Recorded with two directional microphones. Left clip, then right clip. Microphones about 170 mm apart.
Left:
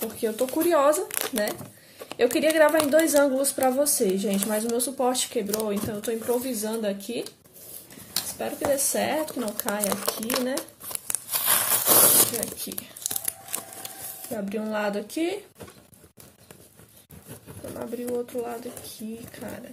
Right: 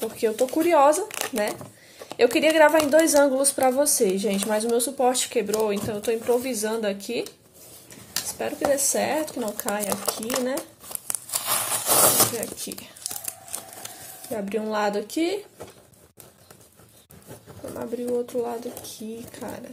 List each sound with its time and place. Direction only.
0.2 s a woman's voice: 5° right (ahead or behind)
1.5 s a sound: 10° left (ahead or behind)
2.3 s a woman's voice: centre (ahead or behind)
8.4 s a woman's voice: 5° right (ahead or behind)
9.8 s speech: 20° left (ahead or behind)
10.6 s crumpling: 25° left (ahead or behind)
11.3 s scrape: 15° left (ahead or behind)
12.4 s a woman's voice: centre (ahead or behind)
14.3 s speech: 10° right (ahead or behind)
17.7 s speech: 15° right (ahead or behind)